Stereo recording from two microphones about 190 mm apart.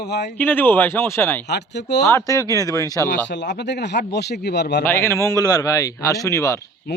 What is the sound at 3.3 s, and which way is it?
A man's voice, 65° left (ahead or behind).